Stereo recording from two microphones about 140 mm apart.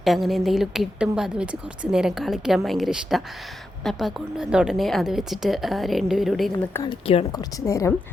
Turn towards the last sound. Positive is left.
turn(degrees=20)  # may be behind; listen again after turning